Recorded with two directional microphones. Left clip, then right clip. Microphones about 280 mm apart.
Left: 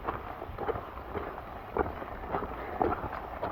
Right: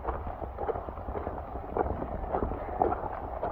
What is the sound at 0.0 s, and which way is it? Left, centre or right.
Wind noise, left.